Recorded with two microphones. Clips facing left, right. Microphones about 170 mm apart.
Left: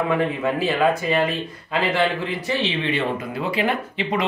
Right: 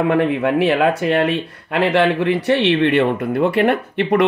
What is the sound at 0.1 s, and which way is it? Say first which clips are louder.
Speech: right 5 dB; 70° right (ahead or behind).